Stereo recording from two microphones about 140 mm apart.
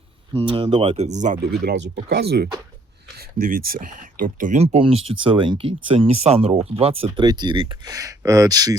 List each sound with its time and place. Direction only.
0.3 s speech: 40° right (ahead or behind); by 1.7 s 65° right (ahead or behind)
3.2 s speech: 90° right; by 4.6 s 70° right (ahead or behind)
4.6 s speech: 45° right (ahead or behind)
7.3 s speech: 30° right (ahead or behind)
7.9 s speech: 25° right (ahead or behind)